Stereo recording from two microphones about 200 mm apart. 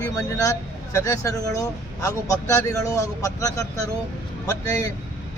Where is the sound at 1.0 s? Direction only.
15° left (ahead or behind).